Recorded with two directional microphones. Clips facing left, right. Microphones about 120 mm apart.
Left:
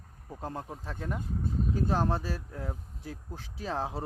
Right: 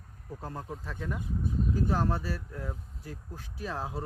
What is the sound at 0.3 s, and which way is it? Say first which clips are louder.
Speech: left 1 dB; 20° left (ahead or behind).